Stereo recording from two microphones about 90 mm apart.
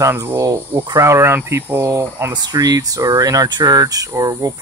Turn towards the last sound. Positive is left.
turn(degrees=-40)  # may be behind; listen again after turning